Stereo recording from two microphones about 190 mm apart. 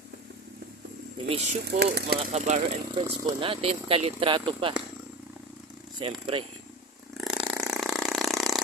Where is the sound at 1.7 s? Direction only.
60° right (ahead or behind).